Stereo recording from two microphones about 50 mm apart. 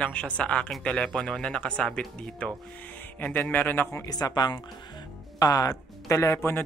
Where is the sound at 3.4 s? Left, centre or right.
Left.